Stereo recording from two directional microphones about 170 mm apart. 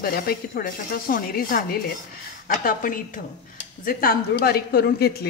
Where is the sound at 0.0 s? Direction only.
60° left (ahead or behind).